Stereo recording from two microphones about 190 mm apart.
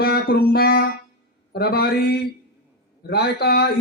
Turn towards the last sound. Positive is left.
turn(degrees=60)  # may be behind; listen again after turning